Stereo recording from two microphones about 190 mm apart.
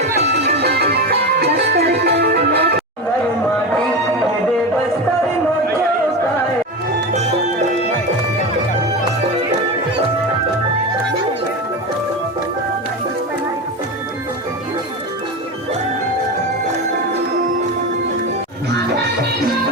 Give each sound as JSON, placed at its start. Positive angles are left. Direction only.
{"t": 0.0, "sound": "music", "side_deg": -60}